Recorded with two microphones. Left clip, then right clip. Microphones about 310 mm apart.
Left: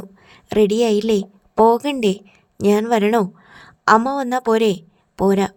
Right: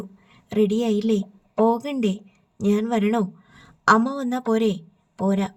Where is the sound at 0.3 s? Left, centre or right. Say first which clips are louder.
Left 6 dB; left.